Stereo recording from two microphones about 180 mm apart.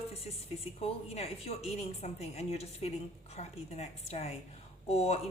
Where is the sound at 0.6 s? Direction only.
35° left (ahead or behind).